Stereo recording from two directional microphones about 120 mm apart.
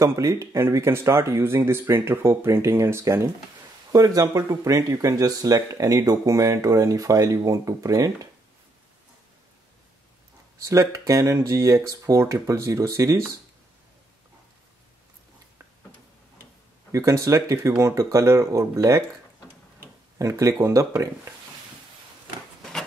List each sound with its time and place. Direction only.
0.0 s speech: 25° right (ahead or behind)
10.6 s speech: 25° right (ahead or behind)
16.9 s speech: 25° right (ahead or behind)
20.2 s speech: 25° right (ahead or behind)